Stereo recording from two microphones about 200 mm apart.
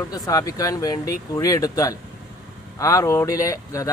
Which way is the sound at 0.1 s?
20° left (ahead or behind).